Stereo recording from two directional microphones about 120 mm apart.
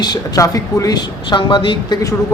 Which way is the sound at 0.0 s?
35° left (ahead or behind).